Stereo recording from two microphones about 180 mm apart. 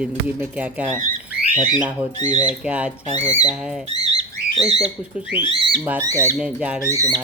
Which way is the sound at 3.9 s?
35° right (ahead or behind).